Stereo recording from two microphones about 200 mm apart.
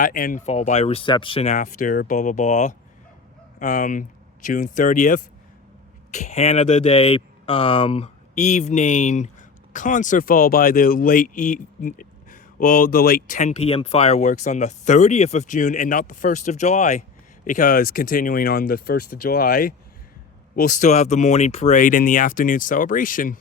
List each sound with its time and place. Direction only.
0.0 s speech: 45° left (ahead or behind)